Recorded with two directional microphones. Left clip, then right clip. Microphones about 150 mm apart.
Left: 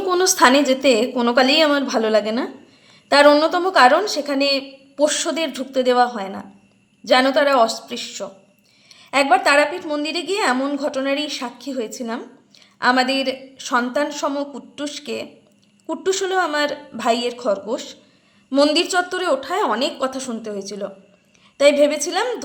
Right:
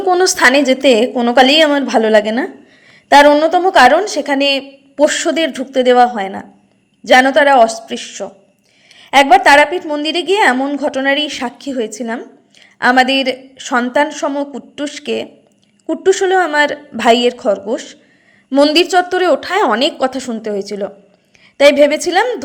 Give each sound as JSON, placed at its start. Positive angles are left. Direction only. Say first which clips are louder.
{"t": 0.2, "sound": "a woman's voice", "louder": "right 1 dB", "side_deg": -20}
{"t": 3.2, "sound": "a woman's voice", "louder": "right 5 dB", "side_deg": -5}